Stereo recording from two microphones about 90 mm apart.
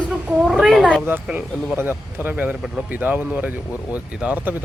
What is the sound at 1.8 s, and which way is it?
Speech, 25° right (ahead or behind).